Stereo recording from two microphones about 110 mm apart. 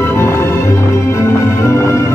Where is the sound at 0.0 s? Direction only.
25° left (ahead or behind).